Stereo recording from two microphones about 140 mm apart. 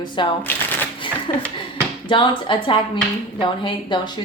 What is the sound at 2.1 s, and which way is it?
A woman's voice, 35° left (ahead or behind).